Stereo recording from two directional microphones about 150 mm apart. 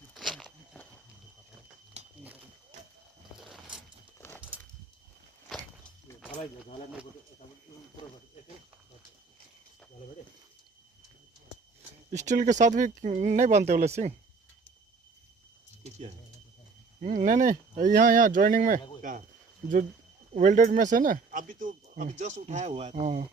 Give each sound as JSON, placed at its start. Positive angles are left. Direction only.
{"t": 0.1, "sound": "a sound", "side_deg": 0}
{"t": 2.2, "sound": "a sound", "side_deg": -10}
{"t": 3.3, "sound": "mechanisms", "side_deg": 0}
{"t": 5.5, "sound": "walk", "side_deg": 5}
{"t": 12.2, "sound": "speech", "side_deg": -55}
{"t": 15.8, "sound": "bird", "side_deg": -45}
{"t": 17.0, "sound": "speech", "side_deg": -55}
{"t": 20.3, "sound": "speech", "side_deg": -60}